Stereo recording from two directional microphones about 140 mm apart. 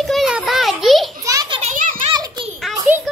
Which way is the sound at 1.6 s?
65° right (ahead or behind).